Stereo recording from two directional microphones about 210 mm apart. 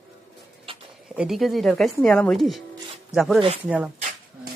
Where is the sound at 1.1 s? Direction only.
5° right (ahead or behind).